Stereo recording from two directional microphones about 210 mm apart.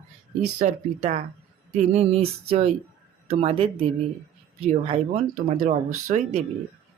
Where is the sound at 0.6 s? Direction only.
40° right (ahead or behind).